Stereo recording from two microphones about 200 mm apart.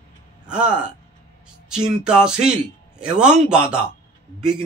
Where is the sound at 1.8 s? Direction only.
5° right (ahead or behind).